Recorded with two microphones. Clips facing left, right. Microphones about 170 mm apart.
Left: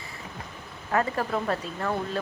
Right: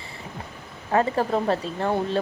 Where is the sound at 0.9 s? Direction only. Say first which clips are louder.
Right 4 dB; 30° right (ahead or behind).